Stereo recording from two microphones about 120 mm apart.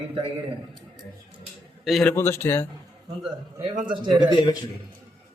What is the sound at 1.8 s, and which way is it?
Speech, centre (ahead or behind).